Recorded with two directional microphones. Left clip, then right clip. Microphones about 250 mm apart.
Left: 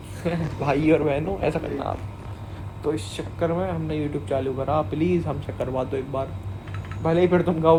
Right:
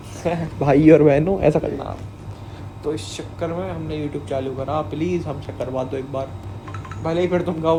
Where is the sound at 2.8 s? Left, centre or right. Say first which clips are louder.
Right 1 dB; centre.